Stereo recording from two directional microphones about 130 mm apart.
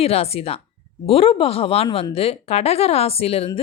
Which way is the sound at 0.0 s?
50° left (ahead or behind).